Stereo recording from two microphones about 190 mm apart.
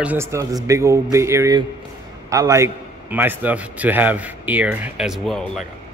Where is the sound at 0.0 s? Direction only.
10° right (ahead or behind).